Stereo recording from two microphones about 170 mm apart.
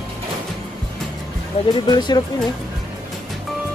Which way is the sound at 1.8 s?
25° left (ahead or behind).